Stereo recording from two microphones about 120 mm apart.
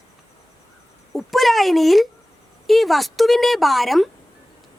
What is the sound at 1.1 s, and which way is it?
A woman's voice, centre (ahead or behind).